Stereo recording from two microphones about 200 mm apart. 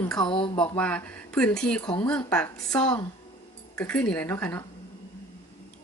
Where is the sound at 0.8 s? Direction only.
5° left (ahead or behind).